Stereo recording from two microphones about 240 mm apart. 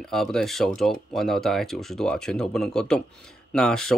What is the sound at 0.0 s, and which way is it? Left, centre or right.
Speech, centre.